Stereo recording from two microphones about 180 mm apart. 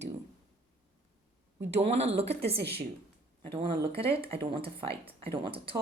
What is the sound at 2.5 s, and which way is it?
Speech, 65° right (ahead or behind).